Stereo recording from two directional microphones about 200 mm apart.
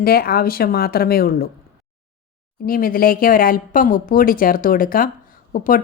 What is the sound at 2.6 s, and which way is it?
A woman's voice, 45° left (ahead or behind).